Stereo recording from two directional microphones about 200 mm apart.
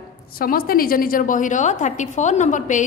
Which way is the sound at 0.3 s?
45° left (ahead or behind).